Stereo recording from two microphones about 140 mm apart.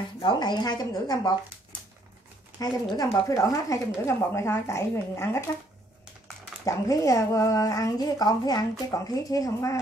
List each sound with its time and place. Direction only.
0.2 s speech: 30° left (ahead or behind)
2.6 s speech: 25° left (ahead or behind)
6.6 s speech: 25° left (ahead or behind)